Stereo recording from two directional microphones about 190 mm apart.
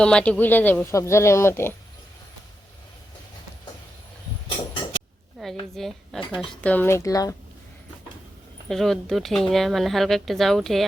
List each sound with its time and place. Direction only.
0.0 s speech: 5° left (ahead or behind)
5.4 s speech: centre (ahead or behind); by 7.3 s 15° left (ahead or behind)
8.7 s speech: centre (ahead or behind)